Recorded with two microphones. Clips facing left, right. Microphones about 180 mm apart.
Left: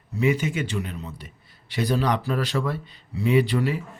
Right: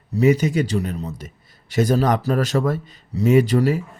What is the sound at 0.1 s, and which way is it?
Speech, 40° right (ahead or behind).